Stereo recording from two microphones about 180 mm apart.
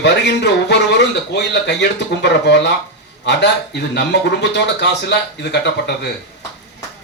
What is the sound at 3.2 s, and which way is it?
Speech, 70° left (ahead or behind).